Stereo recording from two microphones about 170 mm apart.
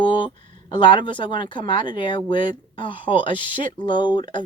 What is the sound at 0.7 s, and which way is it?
Speech, 30° left (ahead or behind).